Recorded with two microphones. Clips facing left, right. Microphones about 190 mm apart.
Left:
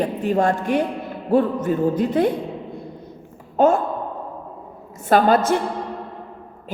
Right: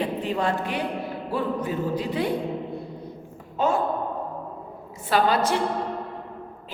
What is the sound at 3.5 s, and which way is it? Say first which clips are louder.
Speech: left 7 dB; 45° left (ahead or behind).